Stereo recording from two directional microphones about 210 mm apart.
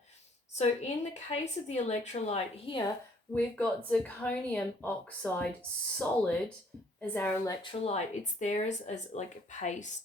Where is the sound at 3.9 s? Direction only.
5° left (ahead or behind).